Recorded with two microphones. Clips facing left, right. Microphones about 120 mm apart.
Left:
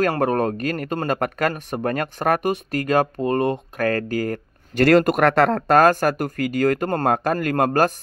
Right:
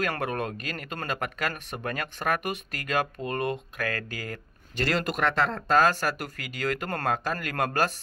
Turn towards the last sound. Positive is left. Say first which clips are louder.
# left 9 dB
turn(degrees=45)  # may be behind; listen again after turning